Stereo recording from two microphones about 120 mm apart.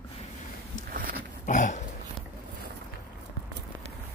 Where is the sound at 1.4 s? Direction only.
90° left.